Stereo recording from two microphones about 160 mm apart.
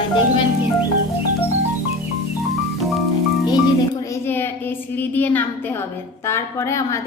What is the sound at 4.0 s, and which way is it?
A woman's voice, 15° left (ahead or behind).